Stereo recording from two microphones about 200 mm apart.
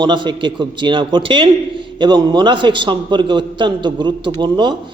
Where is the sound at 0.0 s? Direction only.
25° right (ahead or behind).